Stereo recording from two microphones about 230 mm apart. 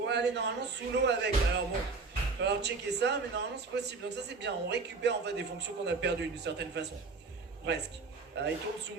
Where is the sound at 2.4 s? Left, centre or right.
Right.